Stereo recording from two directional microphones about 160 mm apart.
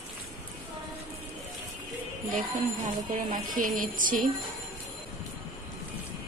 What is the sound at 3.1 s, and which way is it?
Speech, 55° right (ahead or behind).